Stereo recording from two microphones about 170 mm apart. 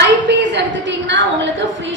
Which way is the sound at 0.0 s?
90° right.